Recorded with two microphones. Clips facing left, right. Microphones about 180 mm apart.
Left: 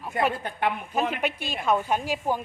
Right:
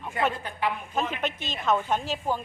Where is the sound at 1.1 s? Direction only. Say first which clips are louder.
Left 2 dB; 10° left (ahead or behind).